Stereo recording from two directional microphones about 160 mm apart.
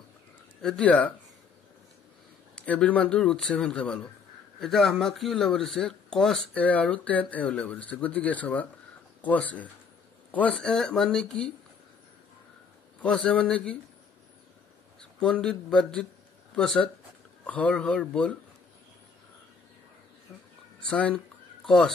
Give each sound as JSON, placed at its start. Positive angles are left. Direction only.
{"t": 0.6, "sound": "speech", "side_deg": 5}
{"t": 2.5, "sound": "speech", "side_deg": 5}
{"t": 13.0, "sound": "speech", "side_deg": 5}
{"t": 15.0, "sound": "speech", "side_deg": 5}
{"t": 20.9, "sound": "speech", "side_deg": 10}